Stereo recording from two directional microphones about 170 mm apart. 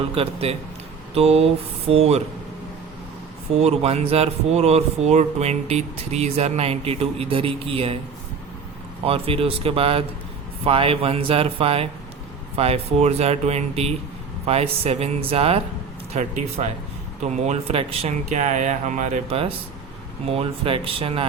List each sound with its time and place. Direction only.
0.1 s speech: 35° right (ahead or behind)
3.5 s speech: 40° right (ahead or behind)
9.0 s speech: 35° right (ahead or behind)